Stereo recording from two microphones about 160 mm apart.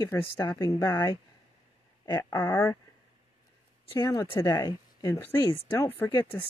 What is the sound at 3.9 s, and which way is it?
Speech, 25° left (ahead or behind).